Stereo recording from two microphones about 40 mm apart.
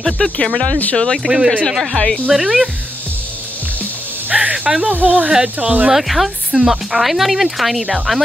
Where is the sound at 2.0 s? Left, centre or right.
Left.